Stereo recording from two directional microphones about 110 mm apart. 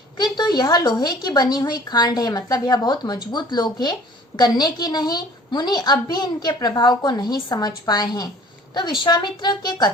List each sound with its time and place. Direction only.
0.2 s a woman's voice: 40° left (ahead or behind)